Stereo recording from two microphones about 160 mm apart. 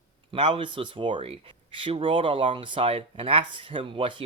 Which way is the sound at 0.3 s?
35° right (ahead or behind).